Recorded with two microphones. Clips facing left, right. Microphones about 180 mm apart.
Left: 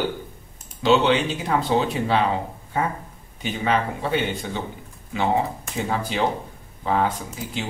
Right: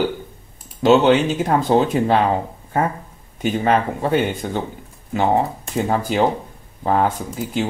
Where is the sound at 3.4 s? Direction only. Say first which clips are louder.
Right 5 dB; 45° right (ahead or behind).